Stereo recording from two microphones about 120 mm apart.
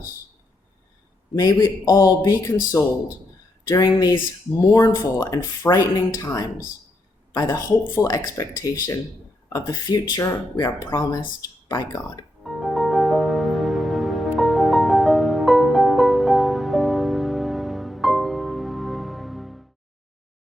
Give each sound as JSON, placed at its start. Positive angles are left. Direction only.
{"t": 1.4, "sound": "a man's voice", "side_deg": 30}
{"t": 12.4, "sound": "music", "side_deg": 0}